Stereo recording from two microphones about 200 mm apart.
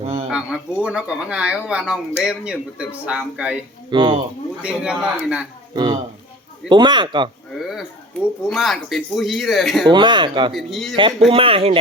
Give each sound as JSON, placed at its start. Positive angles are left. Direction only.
{"t": 0.0, "sound": "a sound", "side_deg": -30}
{"t": 0.3, "sound": "speech", "side_deg": -5}
{"t": 3.9, "sound": "a man's voice", "side_deg": -25}
{"t": 4.6, "sound": "speech", "side_deg": -5}
{"t": 5.7, "sound": "a man's voice", "side_deg": -20}
{"t": 7.5, "sound": "a sound", "side_deg": 0}
{"t": 8.4, "sound": "speech", "side_deg": 0}
{"t": 9.9, "sound": "a man's voice", "side_deg": -25}
{"t": 10.5, "sound": "speech", "side_deg": 0}
{"t": 11.3, "sound": "a man's voice", "side_deg": -25}